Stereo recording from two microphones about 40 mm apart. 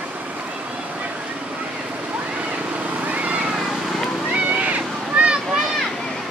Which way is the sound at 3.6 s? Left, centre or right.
Centre.